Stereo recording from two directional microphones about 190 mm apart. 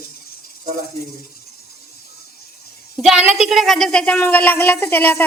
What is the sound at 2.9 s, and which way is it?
A woman's voice, 5° right (ahead or behind).